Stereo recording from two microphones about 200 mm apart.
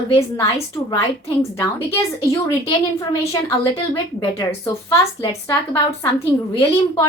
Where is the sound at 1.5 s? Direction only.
15° left (ahead or behind).